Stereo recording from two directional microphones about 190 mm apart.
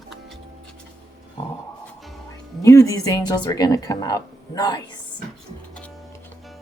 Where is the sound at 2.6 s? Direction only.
15° left (ahead or behind).